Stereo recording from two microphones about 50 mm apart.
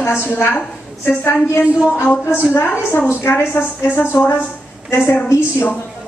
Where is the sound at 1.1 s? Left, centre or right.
Left.